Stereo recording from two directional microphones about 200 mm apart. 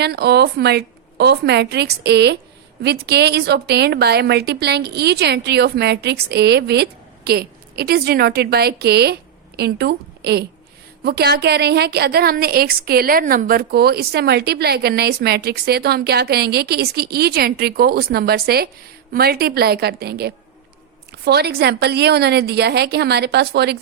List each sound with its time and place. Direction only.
0.0 s a woman's voice: 55° right (ahead or behind)